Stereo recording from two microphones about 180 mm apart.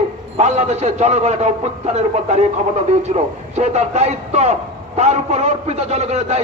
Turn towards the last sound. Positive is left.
turn(degrees=-35)  # may be behind; listen again after turning